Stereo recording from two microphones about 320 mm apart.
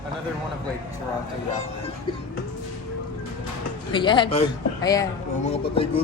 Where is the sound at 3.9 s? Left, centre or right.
Centre.